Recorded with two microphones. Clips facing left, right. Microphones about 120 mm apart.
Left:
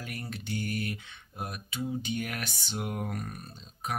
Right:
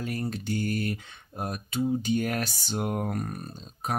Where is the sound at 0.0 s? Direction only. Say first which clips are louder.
Right 8 dB; 35° right (ahead or behind).